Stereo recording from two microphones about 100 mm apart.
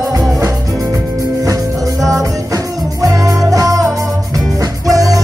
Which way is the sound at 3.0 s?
35° right (ahead or behind).